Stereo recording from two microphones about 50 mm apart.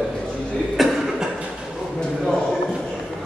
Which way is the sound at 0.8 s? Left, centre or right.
Centre.